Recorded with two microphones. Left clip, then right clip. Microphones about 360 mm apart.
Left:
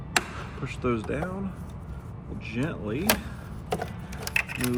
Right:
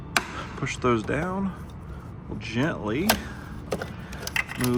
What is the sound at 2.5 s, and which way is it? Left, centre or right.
Speech, right.